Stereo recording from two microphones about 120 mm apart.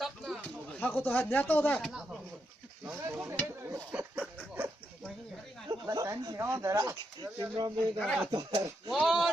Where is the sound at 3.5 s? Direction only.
20° right (ahead or behind).